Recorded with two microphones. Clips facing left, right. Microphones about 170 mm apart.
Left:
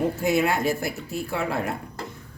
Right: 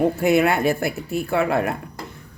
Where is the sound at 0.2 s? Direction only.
65° right (ahead or behind).